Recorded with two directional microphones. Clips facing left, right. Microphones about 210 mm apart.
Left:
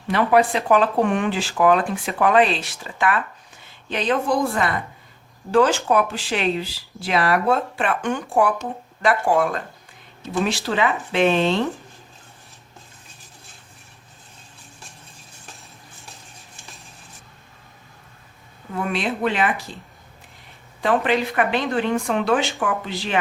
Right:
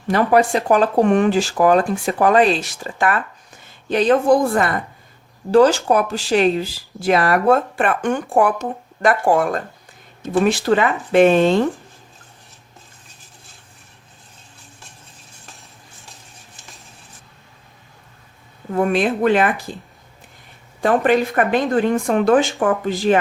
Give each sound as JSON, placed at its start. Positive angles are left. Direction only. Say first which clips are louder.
{"t": 0.1, "sound": "speech", "louder": "right 2 dB", "side_deg": -40}
{"t": 18.7, "sound": "speech", "louder": "right 7 dB", "side_deg": -45}
{"t": 20.8, "sound": "speech", "louder": "right 4 dB", "side_deg": -50}